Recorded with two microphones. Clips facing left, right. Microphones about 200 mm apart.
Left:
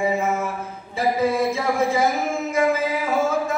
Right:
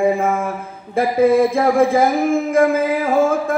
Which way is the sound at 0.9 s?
55° right (ahead or behind).